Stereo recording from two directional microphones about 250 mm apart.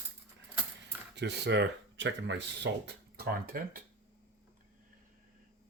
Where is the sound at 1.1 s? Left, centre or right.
Right.